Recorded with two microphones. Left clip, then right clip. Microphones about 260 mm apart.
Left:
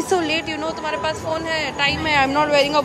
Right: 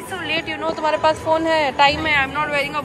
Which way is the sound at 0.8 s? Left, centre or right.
Centre.